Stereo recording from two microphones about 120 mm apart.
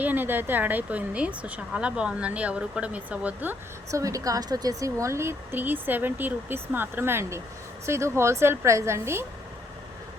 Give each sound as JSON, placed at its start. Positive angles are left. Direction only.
{"t": 0.0, "sound": "speech", "side_deg": -15}
{"t": 4.0, "sound": "speech", "side_deg": -30}